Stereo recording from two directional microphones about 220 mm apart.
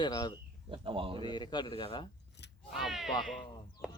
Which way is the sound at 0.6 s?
25° right (ahead or behind).